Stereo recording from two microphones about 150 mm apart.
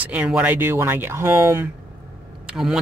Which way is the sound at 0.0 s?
10° right (ahead or behind).